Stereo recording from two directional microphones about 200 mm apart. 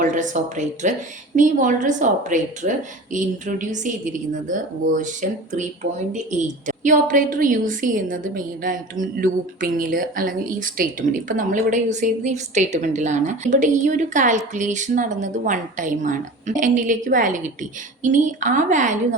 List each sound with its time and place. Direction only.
0.0 s a woman's voice: 40° right (ahead or behind)